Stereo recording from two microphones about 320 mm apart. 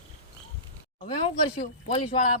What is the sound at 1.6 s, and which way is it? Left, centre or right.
Speech, left.